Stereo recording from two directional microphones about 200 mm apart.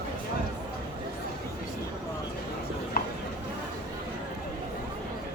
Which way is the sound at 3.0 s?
50° left (ahead or behind).